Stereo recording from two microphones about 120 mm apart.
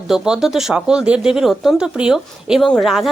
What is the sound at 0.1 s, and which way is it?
A woman's voice, 5° right (ahead or behind).